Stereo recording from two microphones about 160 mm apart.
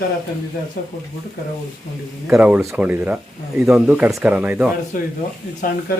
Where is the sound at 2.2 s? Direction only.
10° right (ahead or behind).